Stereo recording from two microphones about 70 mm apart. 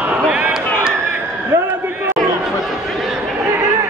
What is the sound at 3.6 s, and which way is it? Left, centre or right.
Chatter, right.